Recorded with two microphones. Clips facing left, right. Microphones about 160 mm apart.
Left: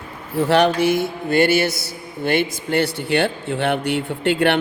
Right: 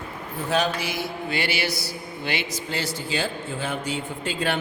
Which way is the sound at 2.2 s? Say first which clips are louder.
Left 10 dB; 50° left (ahead or behind).